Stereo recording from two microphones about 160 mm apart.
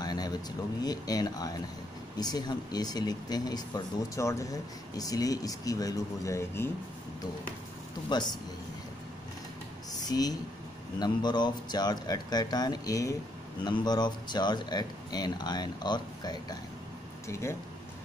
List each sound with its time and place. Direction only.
0.0 s a sound: 25° left (ahead or behind)
0.8 s speech: 25° left (ahead or behind)
8.1 s speech: 25° left (ahead or behind)
10.0 s a woman's voice: 25° left (ahead or behind)